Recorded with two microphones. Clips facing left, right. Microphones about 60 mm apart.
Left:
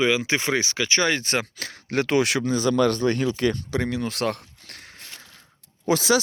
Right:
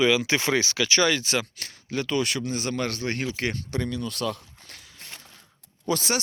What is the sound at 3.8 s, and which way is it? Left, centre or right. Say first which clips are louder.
Speech: left 2 dB; left.